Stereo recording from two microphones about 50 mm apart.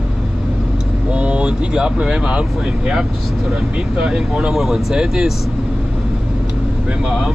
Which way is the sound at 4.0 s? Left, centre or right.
Centre.